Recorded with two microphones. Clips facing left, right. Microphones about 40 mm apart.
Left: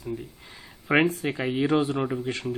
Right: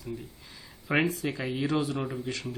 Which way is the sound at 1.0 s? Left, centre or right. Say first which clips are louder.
Left 4 dB; left.